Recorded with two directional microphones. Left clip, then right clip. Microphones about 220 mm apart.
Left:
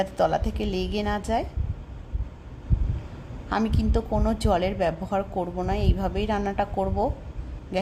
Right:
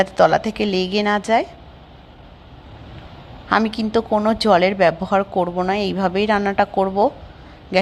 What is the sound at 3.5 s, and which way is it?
A woman's voice, 15° right (ahead or behind).